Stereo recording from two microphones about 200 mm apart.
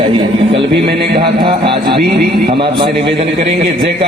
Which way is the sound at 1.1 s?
25° right (ahead or behind).